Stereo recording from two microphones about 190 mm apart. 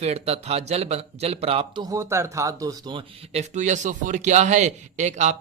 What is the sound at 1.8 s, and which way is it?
Speech, 15° right (ahead or behind).